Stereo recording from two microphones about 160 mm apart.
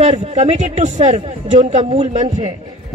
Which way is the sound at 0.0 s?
40° right (ahead or behind).